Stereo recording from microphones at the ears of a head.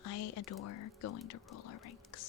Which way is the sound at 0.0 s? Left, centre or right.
Left.